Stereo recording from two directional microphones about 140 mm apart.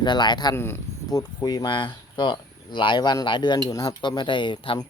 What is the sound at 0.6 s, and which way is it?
Speech, 15° left (ahead or behind).